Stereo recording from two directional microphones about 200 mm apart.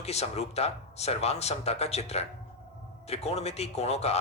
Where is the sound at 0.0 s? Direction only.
30° left (ahead or behind).